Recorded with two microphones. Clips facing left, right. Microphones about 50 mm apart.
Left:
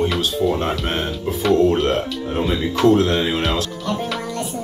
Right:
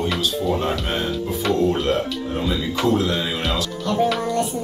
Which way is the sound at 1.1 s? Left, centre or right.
Centre.